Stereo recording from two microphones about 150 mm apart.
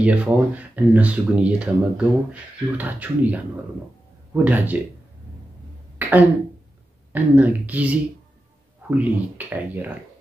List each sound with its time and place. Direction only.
0.0 s speech: 10° right (ahead or behind)
5.9 s a sound: 10° right (ahead or behind)
7.1 s speech: 10° right (ahead or behind)